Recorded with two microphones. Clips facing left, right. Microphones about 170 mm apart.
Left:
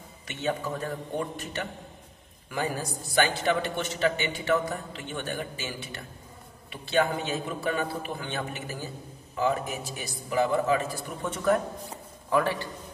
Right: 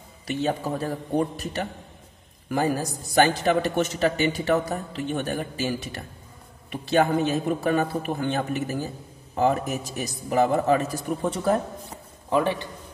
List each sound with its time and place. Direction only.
0.3 s a man's voice: 35° right (ahead or behind)
12.3 s a man's voice: 20° right (ahead or behind)